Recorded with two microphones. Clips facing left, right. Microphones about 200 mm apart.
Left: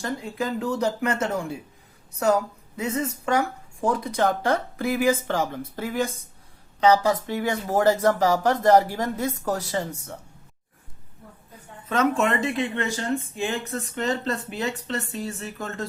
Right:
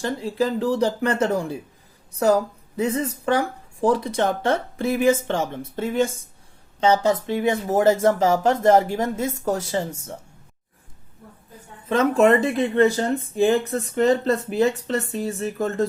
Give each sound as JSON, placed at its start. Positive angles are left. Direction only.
{"t": 0.0, "sound": "speech", "side_deg": -30}
{"t": 11.9, "sound": "speech", "side_deg": -30}